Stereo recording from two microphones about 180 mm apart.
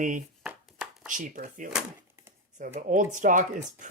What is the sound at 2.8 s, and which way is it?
Speech, 45° right (ahead or behind).